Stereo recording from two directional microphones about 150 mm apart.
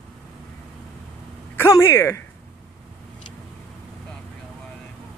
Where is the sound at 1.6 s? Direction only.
20° left (ahead or behind).